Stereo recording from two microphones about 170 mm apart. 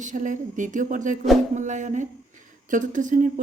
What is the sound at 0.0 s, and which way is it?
A woman's voice, 50° right (ahead or behind).